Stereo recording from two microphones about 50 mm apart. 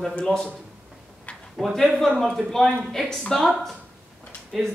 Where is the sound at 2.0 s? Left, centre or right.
Centre.